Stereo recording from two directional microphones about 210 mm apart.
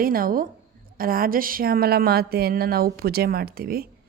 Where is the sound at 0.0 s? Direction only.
45° right (ahead or behind).